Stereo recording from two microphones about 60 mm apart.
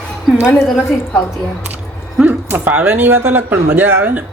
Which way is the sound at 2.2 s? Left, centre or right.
Right.